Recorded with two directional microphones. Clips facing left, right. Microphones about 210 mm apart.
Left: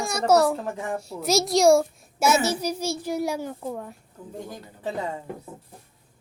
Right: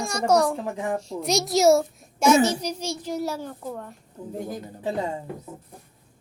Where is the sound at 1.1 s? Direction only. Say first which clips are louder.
Left 4 dB; centre (ahead or behind).